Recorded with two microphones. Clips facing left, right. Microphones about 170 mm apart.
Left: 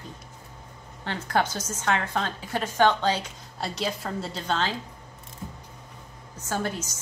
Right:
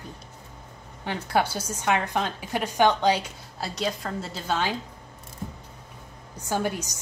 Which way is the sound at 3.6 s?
Centre (ahead or behind).